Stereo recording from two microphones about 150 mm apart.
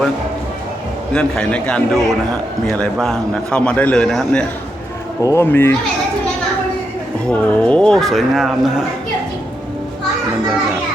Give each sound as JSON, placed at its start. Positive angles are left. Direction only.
{"t": 1.1, "sound": "a man's voice", "side_deg": 5}
{"t": 5.2, "sound": "a man's voice", "side_deg": 20}
{"t": 7.3, "sound": "speech", "side_deg": 5}